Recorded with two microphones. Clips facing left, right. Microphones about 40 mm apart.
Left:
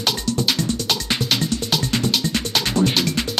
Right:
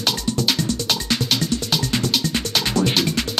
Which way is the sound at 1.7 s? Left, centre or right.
Centre.